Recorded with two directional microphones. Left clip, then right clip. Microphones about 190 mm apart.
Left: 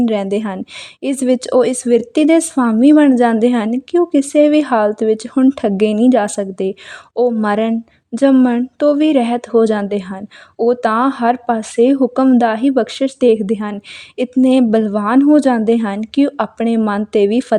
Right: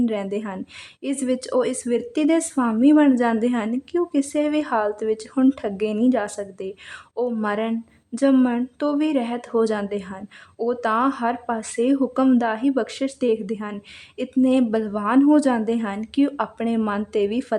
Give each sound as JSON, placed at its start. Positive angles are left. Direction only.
{"t": 0.0, "sound": "a woman's voice", "side_deg": 35}
{"t": 5.6, "sound": "a woman's voice", "side_deg": 35}